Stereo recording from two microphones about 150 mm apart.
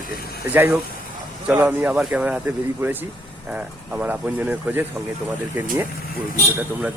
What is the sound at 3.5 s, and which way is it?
Speech, 10° right (ahead or behind).